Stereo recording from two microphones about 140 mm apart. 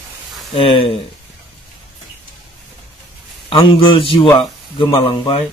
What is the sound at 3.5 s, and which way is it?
A man's voice, 40° left (ahead or behind).